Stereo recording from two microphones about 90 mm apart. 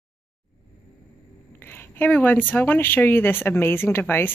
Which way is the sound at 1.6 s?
25° left (ahead or behind).